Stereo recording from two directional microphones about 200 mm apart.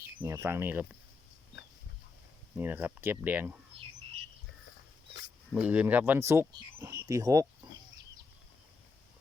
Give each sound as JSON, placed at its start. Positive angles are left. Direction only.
{"t": 0.2, "sound": "speech", "side_deg": -15}
{"t": 2.6, "sound": "speech", "side_deg": -10}
{"t": 5.5, "sound": "speech", "side_deg": -5}
{"t": 7.6, "sound": "chicken", "side_deg": -20}